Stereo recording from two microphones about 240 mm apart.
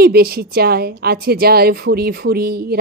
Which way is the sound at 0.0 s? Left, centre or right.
Right.